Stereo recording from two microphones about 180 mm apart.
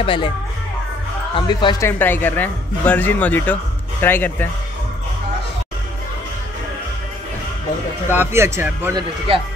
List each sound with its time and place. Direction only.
0.0 s speech: 30° left (ahead or behind)
1.3 s speech: 25° left (ahead or behind)
1.9 s speech: 10° left (ahead or behind)
8.1 s speech: 10° right (ahead or behind)